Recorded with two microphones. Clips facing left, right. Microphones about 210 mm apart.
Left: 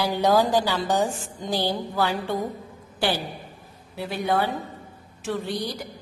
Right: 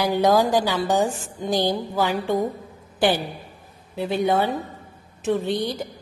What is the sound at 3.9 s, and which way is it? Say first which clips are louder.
Speech: right 4 dB; 20° right (ahead or behind).